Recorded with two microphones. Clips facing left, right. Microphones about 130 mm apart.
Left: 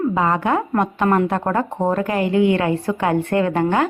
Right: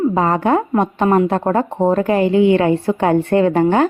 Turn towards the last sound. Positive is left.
turn(degrees=-30)  # may be behind; listen again after turning